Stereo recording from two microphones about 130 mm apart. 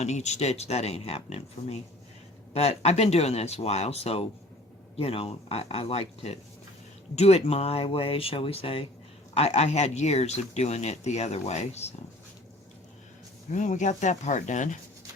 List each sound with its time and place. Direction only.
0.0 s speech: 60° left (ahead or behind)
2.5 s speech: 55° left (ahead or behind)
9.3 s speech: 55° left (ahead or behind)
13.5 s speech: 70° left (ahead or behind)